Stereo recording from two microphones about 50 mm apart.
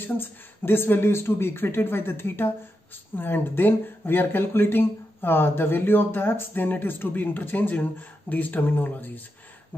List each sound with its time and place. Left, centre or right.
0.0 s speech: left